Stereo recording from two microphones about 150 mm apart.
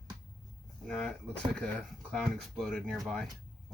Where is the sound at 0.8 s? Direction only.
5° left (ahead or behind).